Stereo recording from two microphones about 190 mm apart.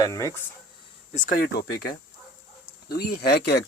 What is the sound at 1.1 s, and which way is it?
Speech, 40° left (ahead or behind).